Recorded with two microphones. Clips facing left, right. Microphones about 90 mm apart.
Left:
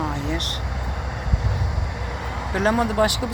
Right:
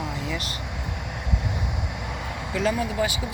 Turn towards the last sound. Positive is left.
turn(degrees=65)  # may be behind; listen again after turning